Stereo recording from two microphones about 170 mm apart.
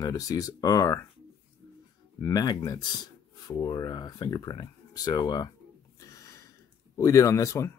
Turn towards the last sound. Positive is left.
turn(degrees=15)  # may be behind; listen again after turning